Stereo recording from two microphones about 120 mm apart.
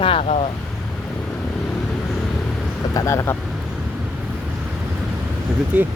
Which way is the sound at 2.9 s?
25° left (ahead or behind).